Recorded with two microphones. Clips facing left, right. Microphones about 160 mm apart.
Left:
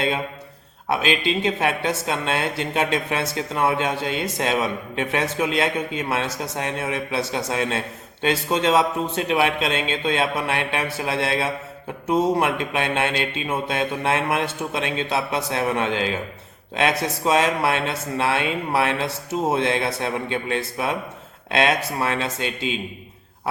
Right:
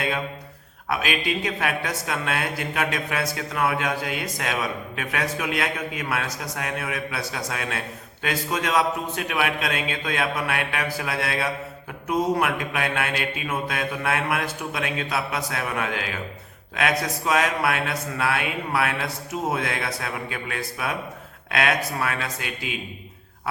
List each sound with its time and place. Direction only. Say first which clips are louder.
0.9 s a man's voice: left 4 dB; 25° left (ahead or behind)